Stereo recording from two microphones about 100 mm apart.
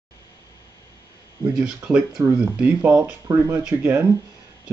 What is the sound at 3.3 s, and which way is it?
Speech, 25° right (ahead or behind).